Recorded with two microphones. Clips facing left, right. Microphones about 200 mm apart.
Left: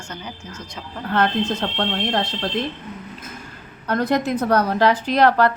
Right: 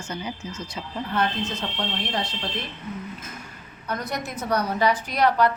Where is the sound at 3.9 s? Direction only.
70° left (ahead or behind); by 5.5 s 90° left.